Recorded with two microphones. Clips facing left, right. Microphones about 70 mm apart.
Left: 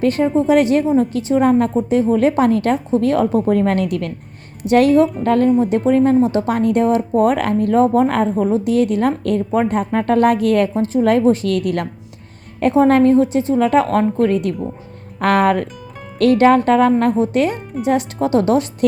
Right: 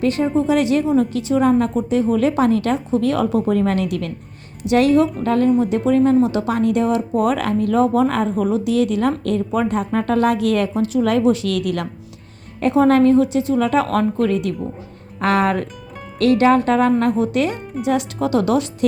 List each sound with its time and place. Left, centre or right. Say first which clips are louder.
0.0 s a woman's voice: left 2 dB; left
8.4 s a woman's voice: left 1 dB; left
10.8 s a woman's voice: left 2 dB; left
12.9 s a woman's voice: left 1 dB; left